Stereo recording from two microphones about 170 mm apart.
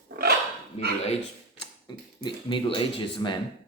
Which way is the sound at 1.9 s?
25° left (ahead or behind).